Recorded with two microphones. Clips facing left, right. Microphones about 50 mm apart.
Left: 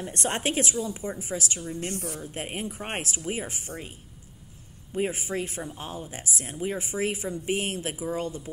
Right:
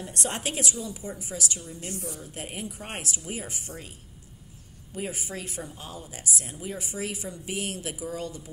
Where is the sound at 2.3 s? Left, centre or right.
Left.